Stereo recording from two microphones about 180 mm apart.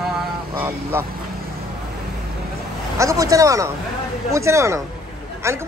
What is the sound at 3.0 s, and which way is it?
A man's voice, 20° right (ahead or behind).